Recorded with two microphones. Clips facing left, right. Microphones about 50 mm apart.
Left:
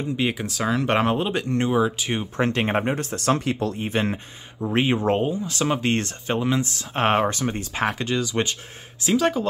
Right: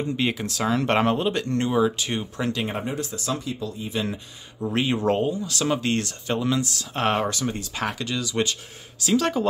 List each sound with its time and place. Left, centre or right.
0.2 s speech: centre
2.3 s speech: left
4.7 s speech: left
9.1 s speech: centre